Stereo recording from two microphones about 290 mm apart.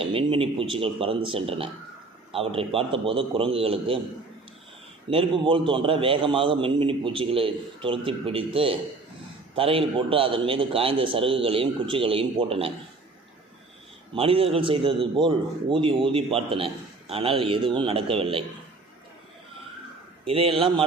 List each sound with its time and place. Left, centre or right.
0.0 s a man's voice: centre
5.1 s a man's voice: centre
14.1 s a man's voice: centre
20.2 s a man's voice: centre